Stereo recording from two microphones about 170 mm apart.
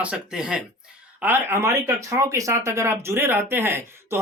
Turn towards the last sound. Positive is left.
turn(degrees=-15)  # may be behind; listen again after turning